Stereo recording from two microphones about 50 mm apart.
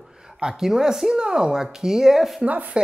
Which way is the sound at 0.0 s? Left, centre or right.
Centre.